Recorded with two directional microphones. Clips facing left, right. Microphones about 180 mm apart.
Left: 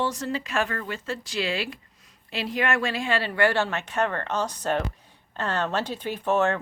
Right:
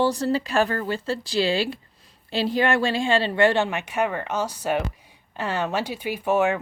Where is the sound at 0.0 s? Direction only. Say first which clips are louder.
Right 6 dB; 35° right (ahead or behind).